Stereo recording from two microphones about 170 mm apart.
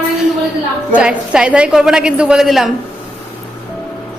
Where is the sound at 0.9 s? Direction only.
5° right (ahead or behind).